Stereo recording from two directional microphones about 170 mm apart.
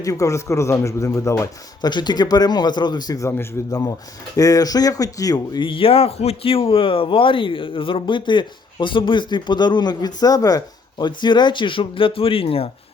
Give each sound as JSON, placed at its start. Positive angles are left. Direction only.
{"t": 0.0, "sound": "speech", "side_deg": 20}